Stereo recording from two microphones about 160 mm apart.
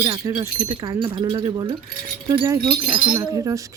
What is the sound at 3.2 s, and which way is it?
Speech, 20° right (ahead or behind).